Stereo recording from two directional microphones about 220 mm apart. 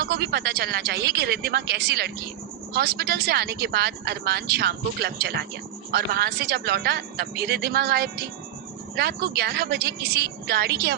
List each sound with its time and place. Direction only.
0.0 s speech: 45° right (ahead or behind)